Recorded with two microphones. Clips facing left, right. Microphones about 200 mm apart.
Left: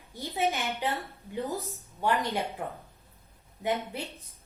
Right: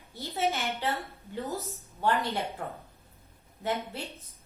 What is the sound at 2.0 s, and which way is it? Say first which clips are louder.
Speech: even; 15° left (ahead or behind).